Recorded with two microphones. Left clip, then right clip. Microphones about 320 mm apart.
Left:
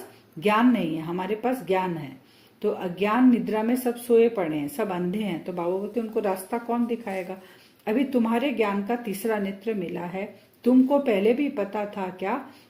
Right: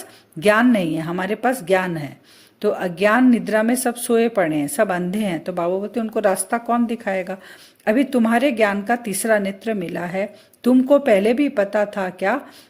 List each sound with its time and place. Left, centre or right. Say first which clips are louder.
0.3 s a woman's voice: right 6 dB; right